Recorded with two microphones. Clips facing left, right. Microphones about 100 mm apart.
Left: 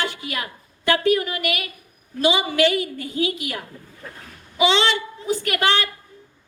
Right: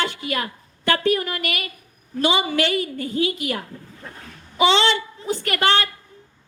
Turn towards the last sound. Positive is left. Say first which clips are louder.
# right 1 dB
turn(degrees=-40)  # may be behind; listen again after turning